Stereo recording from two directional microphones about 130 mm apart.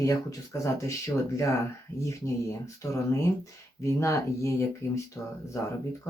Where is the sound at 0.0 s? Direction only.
25° left (ahead or behind).